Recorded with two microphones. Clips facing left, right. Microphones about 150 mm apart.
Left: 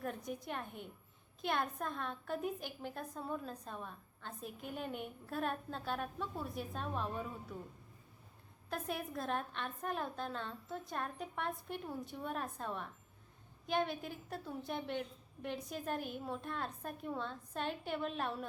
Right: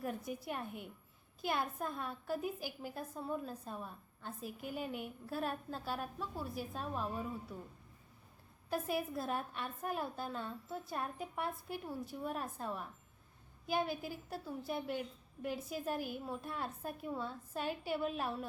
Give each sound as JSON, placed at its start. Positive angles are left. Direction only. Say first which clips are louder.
{"t": 0.0, "sound": "a woman's voice", "louder": "right 1 dB", "side_deg": -5}
{"t": 8.7, "sound": "a woman's voice", "louder": "right 4 dB", "side_deg": -5}